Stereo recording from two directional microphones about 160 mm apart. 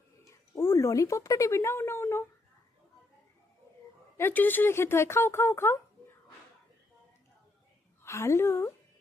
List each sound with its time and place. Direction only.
0.3 s a sound: 15° left (ahead or behind)
4.2 s speech: 10° left (ahead or behind)
8.0 s speech: 15° left (ahead or behind)